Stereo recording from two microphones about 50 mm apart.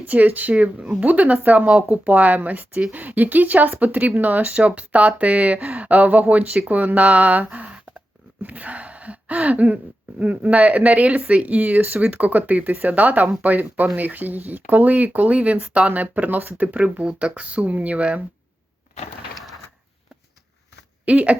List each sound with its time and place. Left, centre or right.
0.0 s speech: right
0.8 s speech: centre
1.0 s speech: right
21.0 s speech: right